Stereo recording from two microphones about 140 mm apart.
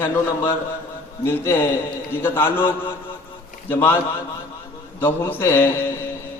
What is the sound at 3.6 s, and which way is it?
Speech, 15° left (ahead or behind).